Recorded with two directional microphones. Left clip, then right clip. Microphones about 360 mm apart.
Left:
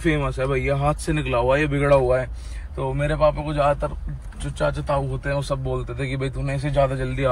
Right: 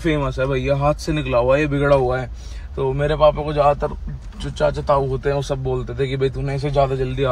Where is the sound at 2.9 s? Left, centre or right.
Centre.